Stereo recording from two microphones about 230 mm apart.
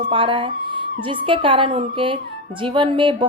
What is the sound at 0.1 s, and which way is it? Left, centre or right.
A woman's voice, right.